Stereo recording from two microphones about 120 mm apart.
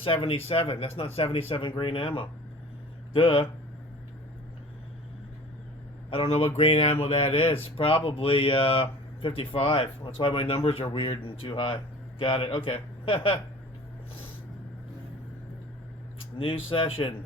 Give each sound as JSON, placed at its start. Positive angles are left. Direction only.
{"t": 0.0, "sound": "speech", "side_deg": 50}
{"t": 6.1, "sound": "speech", "side_deg": 50}
{"t": 16.4, "sound": "speech", "side_deg": 50}